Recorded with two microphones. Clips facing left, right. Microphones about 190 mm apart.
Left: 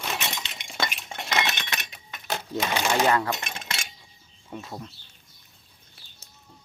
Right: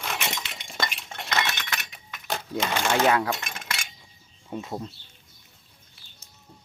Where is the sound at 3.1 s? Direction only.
10° right (ahead or behind).